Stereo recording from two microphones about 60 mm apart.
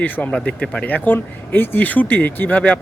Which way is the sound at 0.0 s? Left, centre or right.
Left.